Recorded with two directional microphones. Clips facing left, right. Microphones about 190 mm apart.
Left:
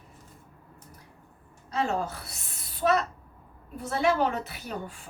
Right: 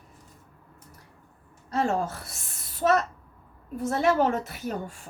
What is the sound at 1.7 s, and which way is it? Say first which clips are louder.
A woman's voice: right 3 dB; 45° right (ahead or behind).